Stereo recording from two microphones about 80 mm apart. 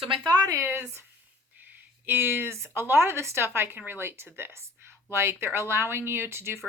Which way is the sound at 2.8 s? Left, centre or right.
Right.